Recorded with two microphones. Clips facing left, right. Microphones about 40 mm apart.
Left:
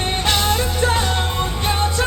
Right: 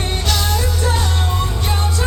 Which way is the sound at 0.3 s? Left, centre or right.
Left.